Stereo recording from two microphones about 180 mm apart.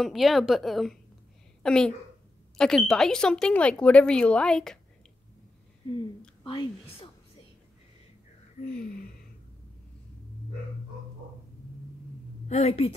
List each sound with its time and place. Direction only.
0.0 s a woman's voice: centre (ahead or behind)
6.4 s a woman's voice: 30° left (ahead or behind)
12.4 s a woman's voice: 40° left (ahead or behind)